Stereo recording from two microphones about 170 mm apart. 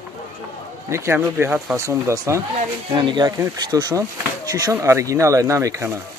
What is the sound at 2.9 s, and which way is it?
Speech, 25° right (ahead or behind).